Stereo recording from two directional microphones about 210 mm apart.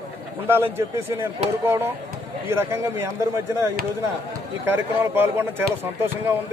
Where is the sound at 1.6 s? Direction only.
10° right (ahead or behind).